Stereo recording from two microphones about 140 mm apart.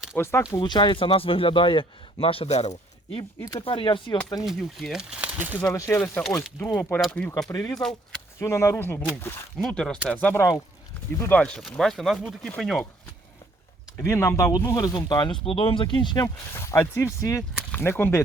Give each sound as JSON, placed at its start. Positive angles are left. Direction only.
{"t": 0.2, "sound": "speech", "side_deg": 20}
{"t": 0.5, "sound": "speech", "side_deg": 30}
{"t": 3.6, "sound": "speech", "side_deg": 40}
{"t": 4.4, "sound": "speech", "side_deg": 0}
{"t": 5.6, "sound": "speech", "side_deg": 20}
{"t": 7.4, "sound": "speech", "side_deg": 25}
{"t": 7.8, "sound": "speech", "side_deg": 5}
{"t": 8.4, "sound": "speech", "side_deg": 20}
{"t": 13.9, "sound": "speech", "side_deg": 20}